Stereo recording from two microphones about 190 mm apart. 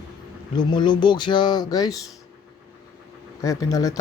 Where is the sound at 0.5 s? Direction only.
25° left (ahead or behind).